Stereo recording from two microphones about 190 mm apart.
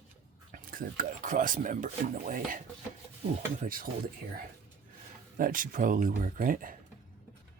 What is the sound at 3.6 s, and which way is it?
Speech, 45° right (ahead or behind).